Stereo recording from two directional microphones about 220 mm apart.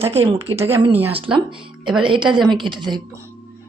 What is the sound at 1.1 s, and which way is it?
Speech, 25° right (ahead or behind).